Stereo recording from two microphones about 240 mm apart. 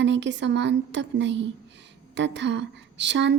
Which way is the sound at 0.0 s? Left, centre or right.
Right.